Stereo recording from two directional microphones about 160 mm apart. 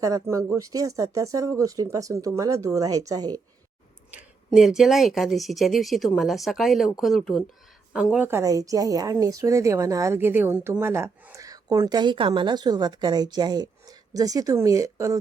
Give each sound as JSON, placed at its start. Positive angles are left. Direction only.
{"t": 0.0, "sound": "a woman's voice", "side_deg": -20}
{"t": 4.1, "sound": "speech", "side_deg": -5}
{"t": 8.3, "sound": "a woman's voice", "side_deg": -20}